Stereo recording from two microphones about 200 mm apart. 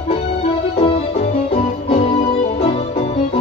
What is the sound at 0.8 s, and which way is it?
Keyboard, 30° left (ahead or behind).